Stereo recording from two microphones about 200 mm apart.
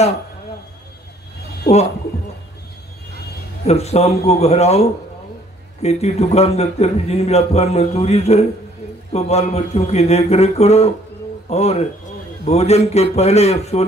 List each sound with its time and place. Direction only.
3.6 s a man's voice: 30° left (ahead or behind)